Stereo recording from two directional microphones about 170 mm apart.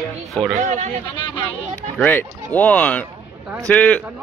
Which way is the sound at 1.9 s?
10° left (ahead or behind).